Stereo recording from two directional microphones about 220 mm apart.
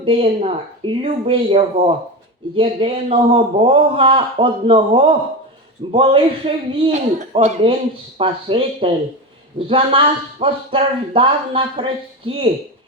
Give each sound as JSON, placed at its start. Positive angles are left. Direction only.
{"t": 0.0, "sound": "speech", "side_deg": -25}